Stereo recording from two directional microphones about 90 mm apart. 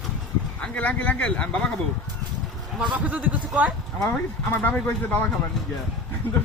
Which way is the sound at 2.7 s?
10° right (ahead or behind).